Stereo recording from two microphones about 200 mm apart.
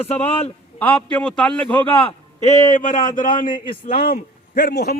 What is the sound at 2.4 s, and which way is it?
A man's voice, 40° left (ahead or behind).